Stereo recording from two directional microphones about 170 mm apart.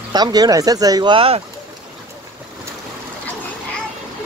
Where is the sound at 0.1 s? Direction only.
25° right (ahead or behind).